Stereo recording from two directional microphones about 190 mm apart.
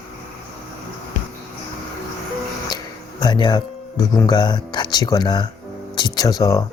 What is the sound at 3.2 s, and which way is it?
Speech, 20° left (ahead or behind).